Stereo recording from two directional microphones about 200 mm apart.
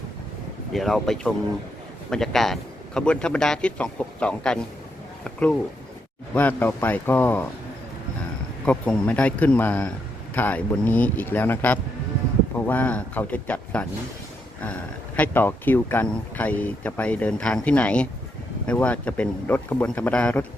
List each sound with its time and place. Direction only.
0.7 s a man's voice: centre (ahead or behind)
8.6 s speech: 5° left (ahead or behind)